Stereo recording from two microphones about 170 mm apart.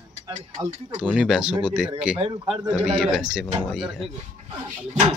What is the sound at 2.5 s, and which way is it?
Speech, 35° right (ahead or behind).